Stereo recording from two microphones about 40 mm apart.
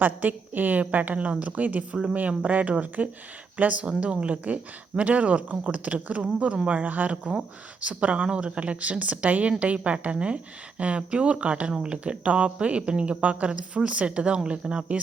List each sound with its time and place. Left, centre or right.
0.0 s a woman's voice: right
6.7 s a woman's voice: right